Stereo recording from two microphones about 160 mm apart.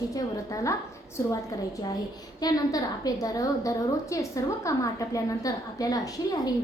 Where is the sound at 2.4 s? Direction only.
25° left (ahead or behind).